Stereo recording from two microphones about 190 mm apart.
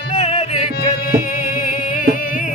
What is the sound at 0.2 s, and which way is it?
Music, 35° left (ahead or behind).